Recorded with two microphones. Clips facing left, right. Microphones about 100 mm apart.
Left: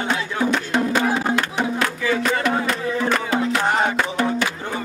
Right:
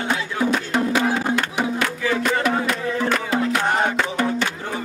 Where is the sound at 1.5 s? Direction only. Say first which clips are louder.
Even; 5° right (ahead or behind).